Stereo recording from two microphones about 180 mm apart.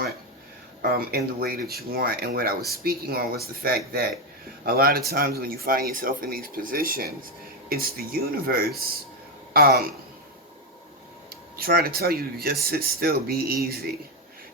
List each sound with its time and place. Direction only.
0.8 s speech: 55° right (ahead or behind)
11.5 s speech: 55° right (ahead or behind)